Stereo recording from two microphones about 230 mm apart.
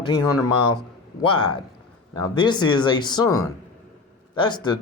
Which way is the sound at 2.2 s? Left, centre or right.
Centre.